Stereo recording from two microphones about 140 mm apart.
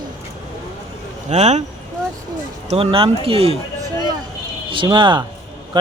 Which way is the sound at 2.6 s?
45° right (ahead or behind).